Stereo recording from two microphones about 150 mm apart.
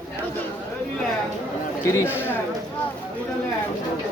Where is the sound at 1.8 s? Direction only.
15° left (ahead or behind).